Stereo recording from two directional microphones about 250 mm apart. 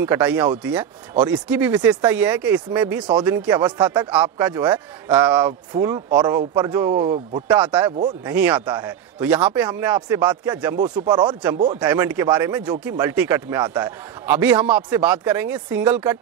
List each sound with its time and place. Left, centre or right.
0.0 s a man's voice: centre
7.5 s speech: centre